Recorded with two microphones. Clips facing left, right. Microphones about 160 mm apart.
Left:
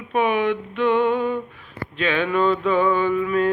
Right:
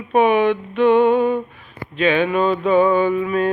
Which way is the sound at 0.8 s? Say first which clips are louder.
Right 6 dB; 20° right (ahead or behind).